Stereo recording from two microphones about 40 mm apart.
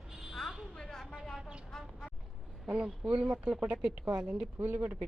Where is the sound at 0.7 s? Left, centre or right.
Centre.